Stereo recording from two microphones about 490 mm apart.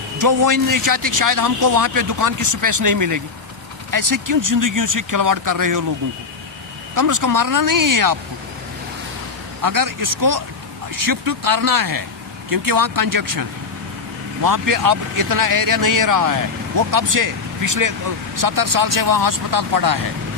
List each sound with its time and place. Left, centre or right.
0.2 s speech: right
6.9 s speech: right
9.6 s speech: right
14.4 s speech: right